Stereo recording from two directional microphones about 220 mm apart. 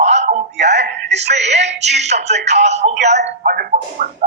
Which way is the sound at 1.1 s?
30° right (ahead or behind).